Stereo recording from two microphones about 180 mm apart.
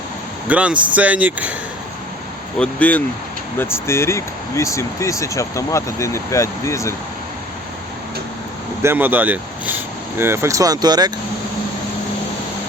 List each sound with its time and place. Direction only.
0.4 s speech: 5° right (ahead or behind)
2.6 s speech: 10° left (ahead or behind)
8.8 s speech: 10° right (ahead or behind)